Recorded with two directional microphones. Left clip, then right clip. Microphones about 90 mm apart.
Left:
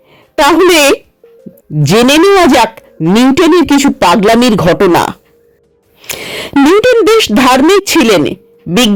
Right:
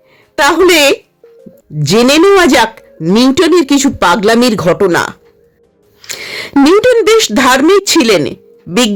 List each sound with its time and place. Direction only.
0.3 s speech: 20° left (ahead or behind)
3.1 s speech: 35° left (ahead or behind)
4.9 s speech: 45° left (ahead or behind)
6.1 s a sound: 25° left (ahead or behind)
6.7 s speech: 15° left (ahead or behind)